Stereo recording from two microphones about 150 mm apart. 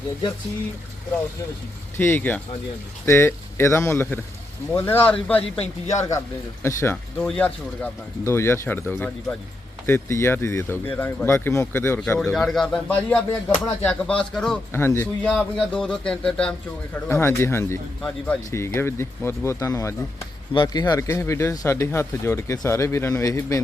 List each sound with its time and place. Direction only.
2.0 s speech: 15° left (ahead or behind)
5.4 s speech: 45° left (ahead or behind)
6.1 s speech: 20° left (ahead or behind)
6.9 s a man's voice: 5° left (ahead or behind)
14.7 s speech: 15° left (ahead or behind)